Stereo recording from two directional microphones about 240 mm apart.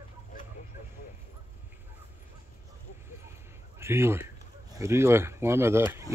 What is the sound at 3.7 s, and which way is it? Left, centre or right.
Speech, centre.